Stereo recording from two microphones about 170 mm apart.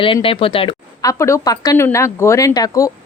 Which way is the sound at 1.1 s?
15° left (ahead or behind).